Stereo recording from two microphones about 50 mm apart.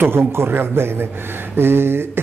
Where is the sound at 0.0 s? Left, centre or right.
Right.